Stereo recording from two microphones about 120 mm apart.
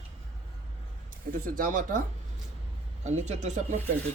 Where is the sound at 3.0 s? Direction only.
75° right (ahead or behind).